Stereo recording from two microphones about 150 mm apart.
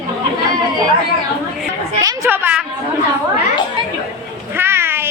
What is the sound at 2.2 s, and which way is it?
Speech, 15° right (ahead or behind).